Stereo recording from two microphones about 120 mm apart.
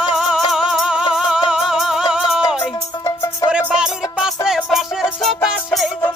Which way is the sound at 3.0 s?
30° left (ahead or behind).